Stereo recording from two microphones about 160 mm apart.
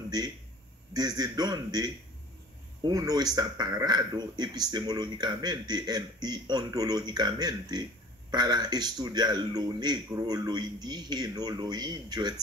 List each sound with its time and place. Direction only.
0.9 s speech: 25° right (ahead or behind)